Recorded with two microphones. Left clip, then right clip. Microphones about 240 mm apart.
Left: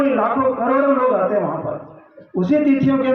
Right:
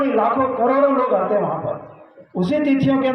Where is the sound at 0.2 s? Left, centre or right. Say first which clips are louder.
Even; right.